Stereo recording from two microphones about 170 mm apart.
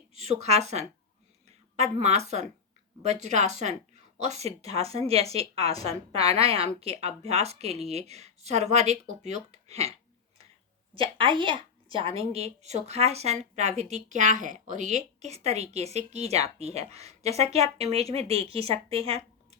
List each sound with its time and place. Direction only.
0.1 s speech: 40° right (ahead or behind)
10.9 s speech: 30° right (ahead or behind)